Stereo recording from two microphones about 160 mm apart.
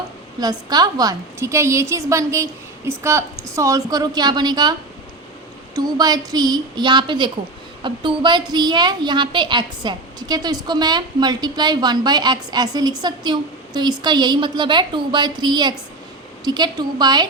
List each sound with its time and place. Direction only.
0.3 s a woman's voice: 25° right (ahead or behind)
5.7 s a woman's voice: 25° right (ahead or behind)